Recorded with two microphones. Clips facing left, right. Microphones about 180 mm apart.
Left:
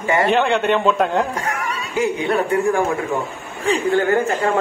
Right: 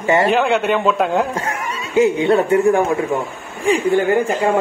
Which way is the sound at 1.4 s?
20° right (ahead or behind).